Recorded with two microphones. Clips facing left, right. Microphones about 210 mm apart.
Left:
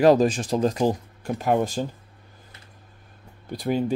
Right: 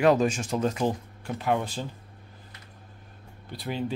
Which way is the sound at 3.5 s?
45° left (ahead or behind).